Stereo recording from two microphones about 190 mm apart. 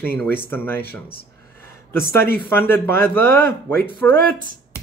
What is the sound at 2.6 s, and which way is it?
Speech, 10° left (ahead or behind).